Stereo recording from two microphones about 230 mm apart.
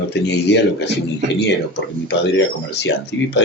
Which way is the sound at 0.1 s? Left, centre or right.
Left.